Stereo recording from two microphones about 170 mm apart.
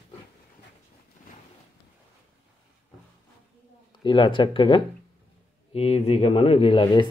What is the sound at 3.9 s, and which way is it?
Speech, 25° left (ahead or behind).